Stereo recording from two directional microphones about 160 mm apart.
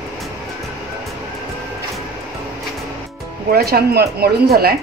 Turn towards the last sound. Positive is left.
turn(degrees=-70)  # may be behind; listen again after turning